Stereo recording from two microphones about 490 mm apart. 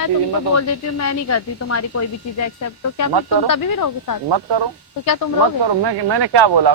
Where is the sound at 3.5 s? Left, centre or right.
Left.